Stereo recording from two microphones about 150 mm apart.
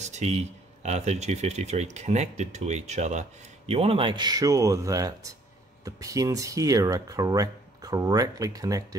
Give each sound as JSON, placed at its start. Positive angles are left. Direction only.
{"t": 0.0, "sound": "speech", "side_deg": -50}